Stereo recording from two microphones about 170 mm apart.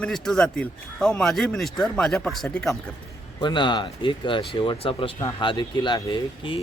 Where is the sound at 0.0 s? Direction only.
5° left (ahead or behind).